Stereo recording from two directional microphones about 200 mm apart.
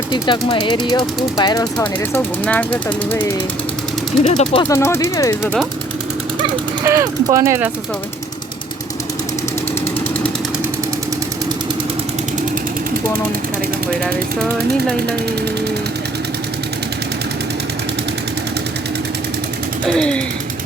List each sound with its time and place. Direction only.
0.1 s speech: 25° left (ahead or behind)
1.8 s speech: 10° left (ahead or behind)
4.2 s speech: 35° left (ahead or behind)
4.7 s speech: 15° left (ahead or behind)
6.8 s speech: 15° right (ahead or behind)
19.9 s speech: 5° left (ahead or behind)